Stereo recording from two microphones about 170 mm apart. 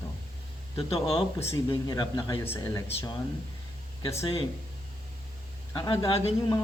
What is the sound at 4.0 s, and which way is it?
Speech, 15° left (ahead or behind).